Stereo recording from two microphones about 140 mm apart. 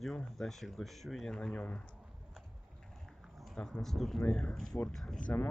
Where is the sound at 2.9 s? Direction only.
Centre (ahead or behind).